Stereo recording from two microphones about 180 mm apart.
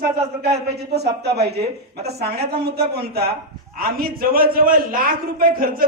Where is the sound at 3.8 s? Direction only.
55° right (ahead or behind).